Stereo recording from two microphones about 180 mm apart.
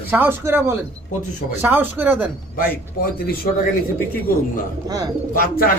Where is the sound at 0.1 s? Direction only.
10° right (ahead or behind).